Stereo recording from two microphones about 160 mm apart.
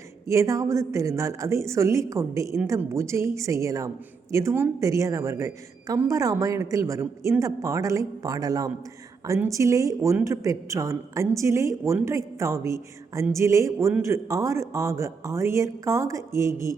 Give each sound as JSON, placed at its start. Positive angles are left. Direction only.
{"t": 0.3, "sound": "speech", "side_deg": -20}